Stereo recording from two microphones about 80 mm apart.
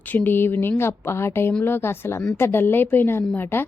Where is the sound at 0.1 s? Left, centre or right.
Left.